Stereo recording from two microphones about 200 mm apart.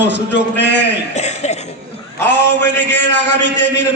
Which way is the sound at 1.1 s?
35° left (ahead or behind).